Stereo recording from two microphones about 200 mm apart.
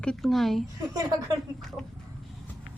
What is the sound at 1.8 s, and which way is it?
Speech, centre (ahead or behind).